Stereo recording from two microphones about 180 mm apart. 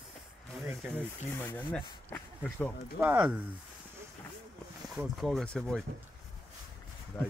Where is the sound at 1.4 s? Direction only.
10° left (ahead or behind).